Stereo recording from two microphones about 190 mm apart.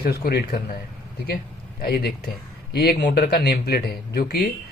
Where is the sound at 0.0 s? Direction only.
55° left (ahead or behind).